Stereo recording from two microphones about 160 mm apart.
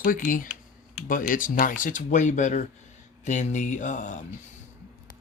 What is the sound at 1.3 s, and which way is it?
Speech, 60° left (ahead or behind).